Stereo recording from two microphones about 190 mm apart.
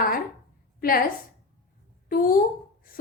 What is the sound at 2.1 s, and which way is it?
Speech, 50° left (ahead or behind).